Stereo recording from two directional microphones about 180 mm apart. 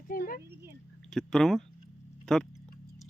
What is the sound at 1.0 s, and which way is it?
Speech, 5° left (ahead or behind).